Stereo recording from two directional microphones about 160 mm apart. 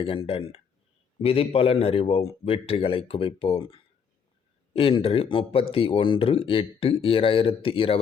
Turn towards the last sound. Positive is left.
turn(degrees=35)  # may be behind; listen again after turning